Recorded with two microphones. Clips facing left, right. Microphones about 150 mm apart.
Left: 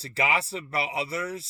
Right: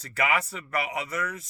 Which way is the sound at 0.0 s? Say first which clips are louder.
Even; 30° left (ahead or behind).